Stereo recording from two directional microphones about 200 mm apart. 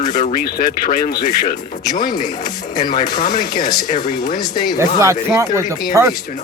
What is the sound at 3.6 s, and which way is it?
Speech, 20° left (ahead or behind).